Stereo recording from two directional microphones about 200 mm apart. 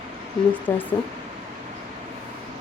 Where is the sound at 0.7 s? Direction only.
10° left (ahead or behind).